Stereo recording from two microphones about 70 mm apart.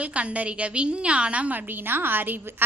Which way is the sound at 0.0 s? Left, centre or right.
Centre.